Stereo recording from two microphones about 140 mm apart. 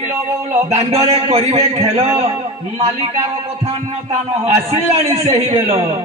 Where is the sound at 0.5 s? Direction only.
45° right (ahead or behind).